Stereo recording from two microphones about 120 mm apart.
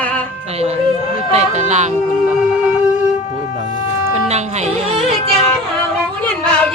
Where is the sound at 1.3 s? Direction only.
70° right (ahead or behind).